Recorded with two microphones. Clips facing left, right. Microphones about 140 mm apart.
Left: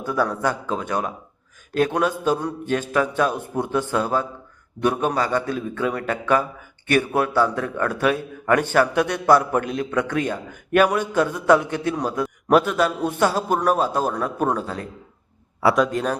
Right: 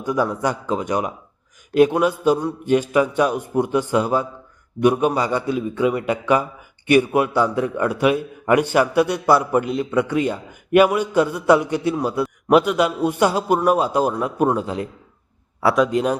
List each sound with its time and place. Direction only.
0.0 s a man's voice: 15° right (ahead or behind)
15.6 s a man's voice: centre (ahead or behind)